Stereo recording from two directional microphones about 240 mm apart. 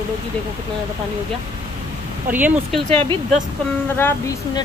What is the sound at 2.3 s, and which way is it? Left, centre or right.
Speech, centre.